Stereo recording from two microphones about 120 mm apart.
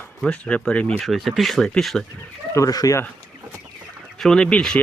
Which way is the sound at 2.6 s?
30° left (ahead or behind).